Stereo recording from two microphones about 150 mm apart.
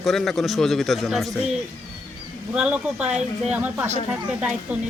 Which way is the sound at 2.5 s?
5° right (ahead or behind).